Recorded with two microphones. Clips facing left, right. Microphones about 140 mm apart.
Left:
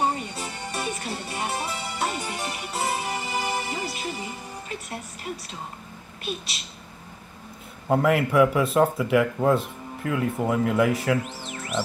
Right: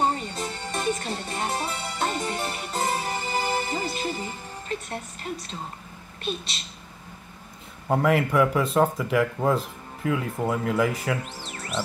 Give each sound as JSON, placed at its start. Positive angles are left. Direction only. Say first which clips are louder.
{"t": 0.0, "sound": "music", "louder": "right 1 dB", "side_deg": 10}
{"t": 6.2, "sound": "speech", "louder": "right 2 dB", "side_deg": 5}
{"t": 7.9, "sound": "speech", "louder": "left 1 dB", "side_deg": 0}